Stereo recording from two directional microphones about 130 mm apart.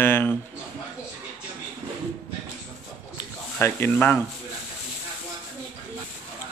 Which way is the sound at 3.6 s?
15° left (ahead or behind).